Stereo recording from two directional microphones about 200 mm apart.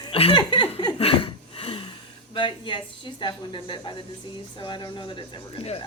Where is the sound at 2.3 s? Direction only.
25° left (ahead or behind).